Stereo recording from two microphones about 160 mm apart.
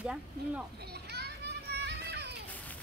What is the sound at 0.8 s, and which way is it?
Children playing, 90° right.